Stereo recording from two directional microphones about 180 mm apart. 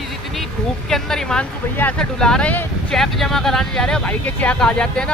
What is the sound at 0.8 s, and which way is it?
Speech, centre (ahead or behind).